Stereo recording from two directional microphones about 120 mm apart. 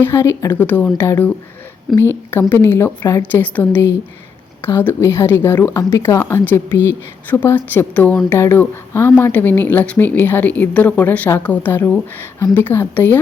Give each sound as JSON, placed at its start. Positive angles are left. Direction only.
{"t": 0.0, "sound": "a woman's voice", "side_deg": 20}